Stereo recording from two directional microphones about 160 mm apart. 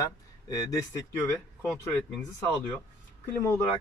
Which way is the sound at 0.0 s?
20° left (ahead or behind).